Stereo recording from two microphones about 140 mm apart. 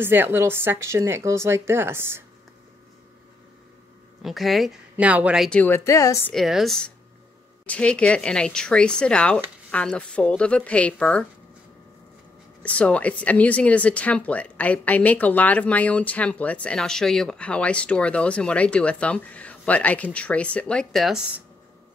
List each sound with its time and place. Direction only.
0.0 s a woman's voice: 15° right (ahead or behind)
4.2 s a woman's voice: centre (ahead or behind)
5.5 s a woman's voice: 10° left (ahead or behind)
5.9 s a woman's voice: 20° left (ahead or behind)
6.3 s a woman's voice: centre (ahead or behind)
12.6 s a woman's voice: 10° left (ahead or behind)